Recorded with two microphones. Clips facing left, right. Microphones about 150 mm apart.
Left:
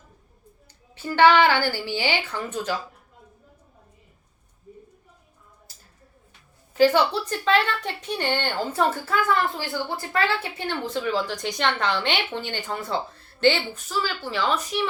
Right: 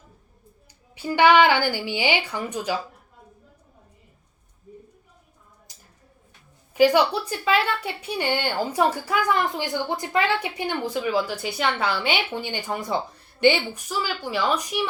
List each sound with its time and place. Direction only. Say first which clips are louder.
0.9 s speech: right 1 dB; 15° right (ahead or behind)
5.7 s a sound: right 1 dB; 15° right (ahead or behind)
6.7 s speech: right 1 dB; 10° right (ahead or behind)